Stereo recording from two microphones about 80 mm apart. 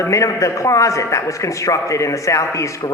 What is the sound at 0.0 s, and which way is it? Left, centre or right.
A man's voice, left.